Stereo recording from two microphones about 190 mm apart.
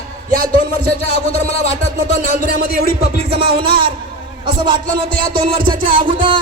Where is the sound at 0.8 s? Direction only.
50° right (ahead or behind).